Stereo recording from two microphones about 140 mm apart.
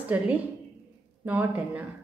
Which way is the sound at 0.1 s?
10° right (ahead or behind).